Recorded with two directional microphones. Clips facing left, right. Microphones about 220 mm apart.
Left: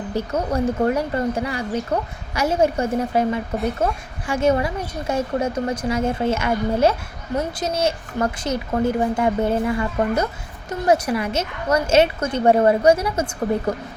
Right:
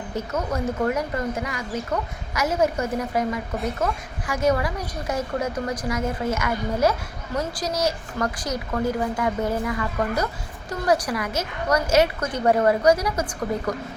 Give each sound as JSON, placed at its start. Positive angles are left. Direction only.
{"t": 0.1, "sound": "a woman's voice", "side_deg": 30}